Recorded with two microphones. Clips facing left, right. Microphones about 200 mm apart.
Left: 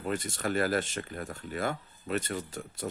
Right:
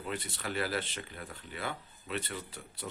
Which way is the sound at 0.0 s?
45° left (ahead or behind).